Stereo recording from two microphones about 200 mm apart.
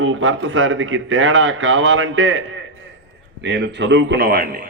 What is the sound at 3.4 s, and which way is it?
A man's voice, 60° right (ahead or behind).